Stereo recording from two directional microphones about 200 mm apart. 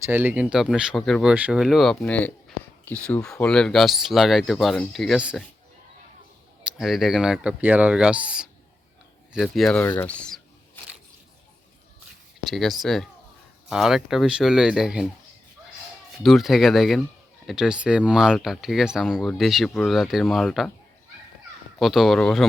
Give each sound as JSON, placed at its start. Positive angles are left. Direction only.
{"t": 0.0, "sound": "speech", "side_deg": -10}
{"t": 6.7, "sound": "speech", "side_deg": 0}
{"t": 12.5, "sound": "speech", "side_deg": 0}
{"t": 16.2, "sound": "speech", "side_deg": 0}
{"t": 21.8, "sound": "speech", "side_deg": 0}